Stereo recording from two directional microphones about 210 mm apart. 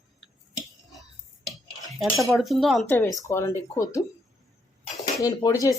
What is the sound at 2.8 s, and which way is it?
Speech, 15° left (ahead or behind).